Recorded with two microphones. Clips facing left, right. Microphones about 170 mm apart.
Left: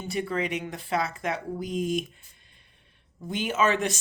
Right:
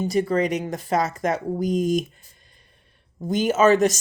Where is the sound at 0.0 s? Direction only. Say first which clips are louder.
Right 8 dB; 40° right (ahead or behind).